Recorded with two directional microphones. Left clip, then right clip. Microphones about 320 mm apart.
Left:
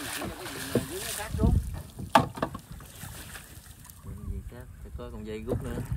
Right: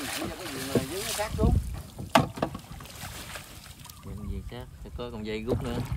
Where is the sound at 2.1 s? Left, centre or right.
Centre.